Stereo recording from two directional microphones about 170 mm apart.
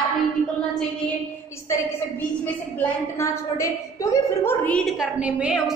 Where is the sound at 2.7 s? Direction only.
20° left (ahead or behind).